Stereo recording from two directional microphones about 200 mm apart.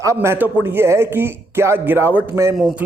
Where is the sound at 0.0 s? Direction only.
15° right (ahead or behind).